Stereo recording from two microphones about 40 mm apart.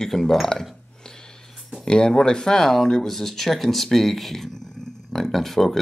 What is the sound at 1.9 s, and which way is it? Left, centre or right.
Speech, centre.